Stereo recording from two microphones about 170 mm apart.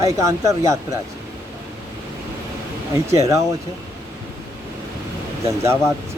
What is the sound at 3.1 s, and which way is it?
Speech, 15° right (ahead or behind).